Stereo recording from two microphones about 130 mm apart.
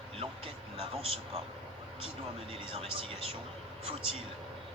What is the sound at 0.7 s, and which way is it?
Speech, 45° right (ahead or behind).